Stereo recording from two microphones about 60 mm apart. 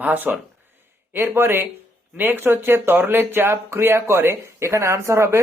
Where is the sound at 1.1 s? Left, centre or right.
Right.